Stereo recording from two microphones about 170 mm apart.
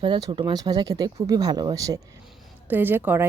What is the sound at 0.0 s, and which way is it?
Speech, 25° right (ahead or behind).